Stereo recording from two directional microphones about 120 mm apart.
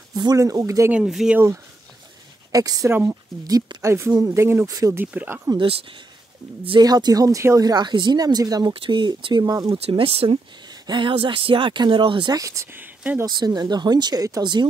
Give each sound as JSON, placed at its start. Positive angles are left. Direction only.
{"t": 0.1, "sound": "speech", "side_deg": -35}
{"t": 0.9, "sound": "speech", "side_deg": -5}
{"t": 2.5, "sound": "speech", "side_deg": -30}
{"t": 2.9, "sound": "speech", "side_deg": -20}
{"t": 3.4, "sound": "speech", "side_deg": -30}
{"t": 5.6, "sound": "speech", "side_deg": -45}
{"t": 6.8, "sound": "speech", "side_deg": -35}
{"t": 8.7, "sound": "speech", "side_deg": -45}
{"t": 9.8, "sound": "speech", "side_deg": -55}
{"t": 10.7, "sound": "speech", "side_deg": -40}
{"t": 12.4, "sound": "speech", "side_deg": -25}
{"t": 12.7, "sound": "speech", "side_deg": -15}
{"t": 13.2, "sound": "speech", "side_deg": -35}